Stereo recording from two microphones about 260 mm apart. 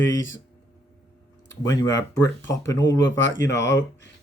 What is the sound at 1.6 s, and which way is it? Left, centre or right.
Speech, centre.